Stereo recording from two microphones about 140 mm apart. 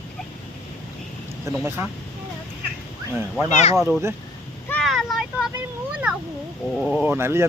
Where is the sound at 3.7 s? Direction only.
Centre (ahead or behind).